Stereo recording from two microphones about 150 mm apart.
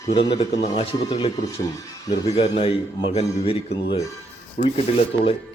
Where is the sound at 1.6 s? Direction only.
25° left (ahead or behind).